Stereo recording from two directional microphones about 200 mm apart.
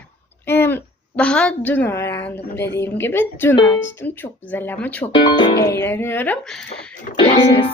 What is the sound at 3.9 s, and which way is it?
Speech, 10° left (ahead or behind).